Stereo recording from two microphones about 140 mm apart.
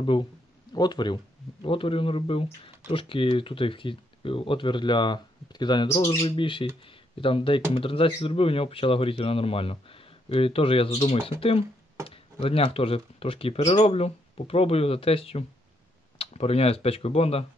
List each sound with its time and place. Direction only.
0.0 s speech: 40° left (ahead or behind)